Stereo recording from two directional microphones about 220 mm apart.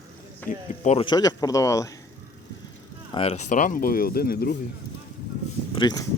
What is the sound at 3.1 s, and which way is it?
Speech, 25° left (ahead or behind).